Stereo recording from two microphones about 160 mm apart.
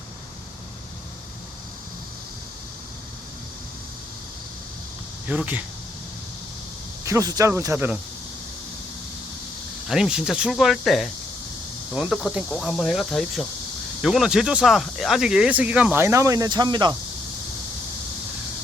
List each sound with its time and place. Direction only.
5.3 s speech: 10° right (ahead or behind)
7.0 s speech: 20° right (ahead or behind)
9.9 s speech: 5° right (ahead or behind); by 16.9 s 25° right (ahead or behind)